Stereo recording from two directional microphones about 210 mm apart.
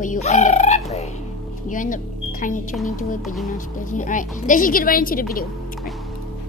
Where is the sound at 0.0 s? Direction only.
35° left (ahead or behind).